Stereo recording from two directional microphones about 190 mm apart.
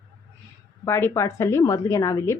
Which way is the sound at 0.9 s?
15° left (ahead or behind).